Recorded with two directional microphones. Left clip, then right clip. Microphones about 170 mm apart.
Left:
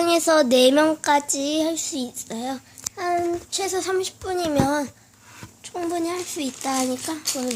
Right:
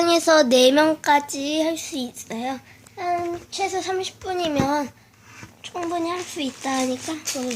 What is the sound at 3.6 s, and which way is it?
Speech, 35° left (ahead or behind).